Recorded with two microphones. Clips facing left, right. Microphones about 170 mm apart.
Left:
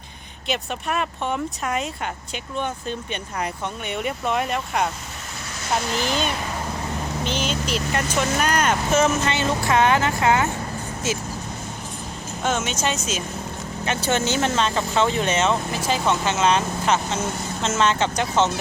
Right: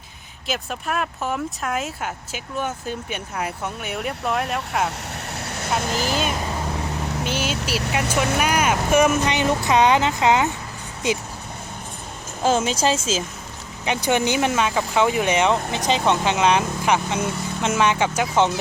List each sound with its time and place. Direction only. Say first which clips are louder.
0.4 s speech: left 1 dB; centre (ahead or behind)
5.8 s speech: right 1 dB; 40° right (ahead or behind)
6.1 s speech: right 1 dB; 5° right (ahead or behind)
12.4 s speech: right 5 dB; 30° right (ahead or behind)
13.8 s speech: right 2 dB; 15° right (ahead or behind)